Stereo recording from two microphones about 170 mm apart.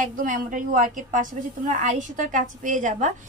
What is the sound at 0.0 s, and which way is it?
A woman's voice, 50° right (ahead or behind).